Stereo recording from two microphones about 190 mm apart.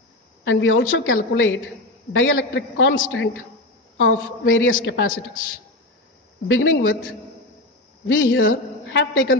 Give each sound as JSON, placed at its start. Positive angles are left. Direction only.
{"t": 0.4, "sound": "a woman's voice", "side_deg": 70}
{"t": 4.8, "sound": "a woman's voice", "side_deg": 80}
{"t": 6.4, "sound": "a man's voice", "side_deg": 80}
{"t": 8.1, "sound": "a man's voice", "side_deg": 90}